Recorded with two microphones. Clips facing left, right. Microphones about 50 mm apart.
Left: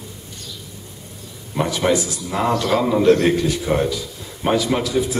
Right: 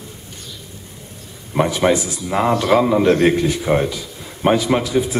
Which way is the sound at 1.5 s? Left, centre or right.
Right.